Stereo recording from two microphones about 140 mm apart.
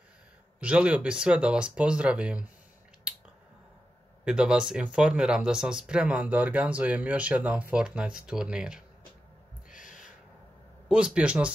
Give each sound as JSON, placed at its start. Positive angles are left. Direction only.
{"t": 0.6, "sound": "speech", "side_deg": -10}
{"t": 4.2, "sound": "speech", "side_deg": -5}
{"t": 9.7, "sound": "owl", "side_deg": 70}
{"t": 10.9, "sound": "speech", "side_deg": -5}